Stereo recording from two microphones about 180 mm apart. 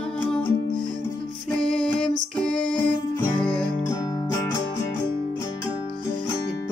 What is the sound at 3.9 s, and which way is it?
Music, 15° left (ahead or behind).